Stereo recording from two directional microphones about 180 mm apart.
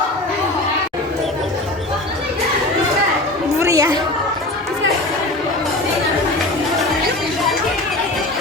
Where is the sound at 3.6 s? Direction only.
15° right (ahead or behind).